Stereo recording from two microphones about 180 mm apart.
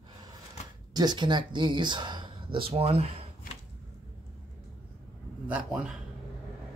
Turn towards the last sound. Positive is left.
turn(degrees=-5)  # may be behind; listen again after turning